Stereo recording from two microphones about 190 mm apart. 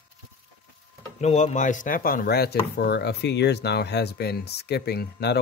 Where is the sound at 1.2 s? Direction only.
40° left (ahead or behind).